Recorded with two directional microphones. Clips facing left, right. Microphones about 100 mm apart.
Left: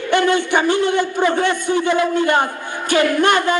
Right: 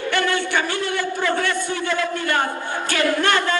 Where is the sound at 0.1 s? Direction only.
20° left (ahead or behind).